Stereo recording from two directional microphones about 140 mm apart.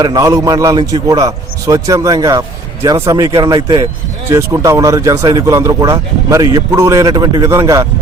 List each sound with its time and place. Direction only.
0.0 s speech: 25° right (ahead or behind)